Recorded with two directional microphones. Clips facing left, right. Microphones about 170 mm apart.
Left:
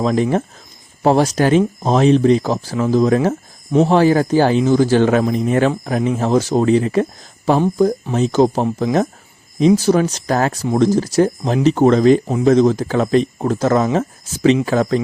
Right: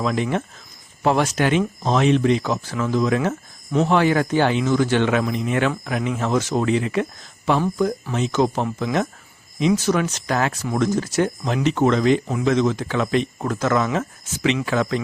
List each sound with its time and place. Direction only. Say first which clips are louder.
0.0 s speech: left 6 dB; 35° left (ahead or behind)